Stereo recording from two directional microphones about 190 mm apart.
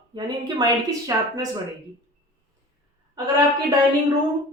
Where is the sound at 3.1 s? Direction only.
20° right (ahead or behind).